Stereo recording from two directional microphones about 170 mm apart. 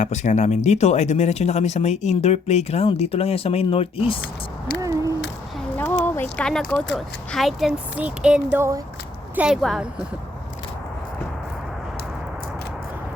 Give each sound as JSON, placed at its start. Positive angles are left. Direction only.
{"t": 0.0, "sound": "speech", "side_deg": 45}
{"t": 4.8, "sound": "owl", "side_deg": -20}
{"t": 6.3, "sound": "speech", "side_deg": 5}